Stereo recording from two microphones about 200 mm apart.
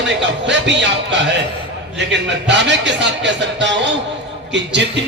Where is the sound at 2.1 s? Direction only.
60° right (ahead or behind).